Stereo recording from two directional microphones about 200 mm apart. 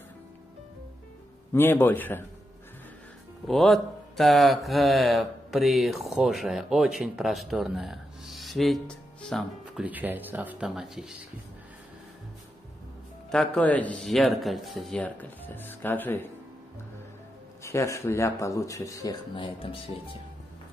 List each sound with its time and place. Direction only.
1.5 s a man's voice: 10° left (ahead or behind)
3.4 s speech: centre (ahead or behind)
9.8 s speech: 10° right (ahead or behind)
13.3 s a man's voice: 5° left (ahead or behind)
17.6 s a man's voice: 15° left (ahead or behind)